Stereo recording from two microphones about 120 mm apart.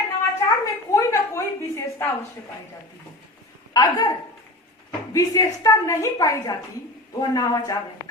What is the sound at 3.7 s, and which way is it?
A woman's voice, 30° left (ahead or behind).